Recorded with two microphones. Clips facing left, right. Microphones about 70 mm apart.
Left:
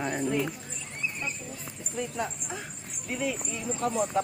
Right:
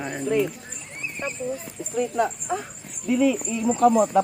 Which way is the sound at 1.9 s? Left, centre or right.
Right.